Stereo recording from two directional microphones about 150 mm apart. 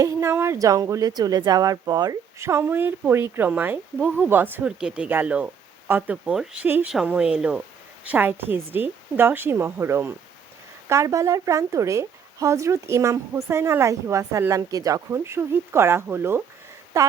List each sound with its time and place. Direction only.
0.0 s a woman's voice: 15° right (ahead or behind)